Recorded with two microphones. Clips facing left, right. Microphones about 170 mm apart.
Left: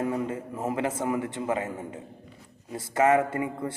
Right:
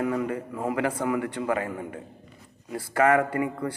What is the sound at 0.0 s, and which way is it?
A man's voice, 25° left (ahead or behind).